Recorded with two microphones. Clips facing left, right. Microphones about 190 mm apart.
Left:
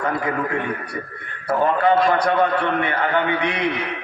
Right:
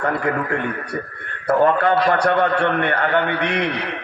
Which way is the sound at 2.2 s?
65° right (ahead or behind).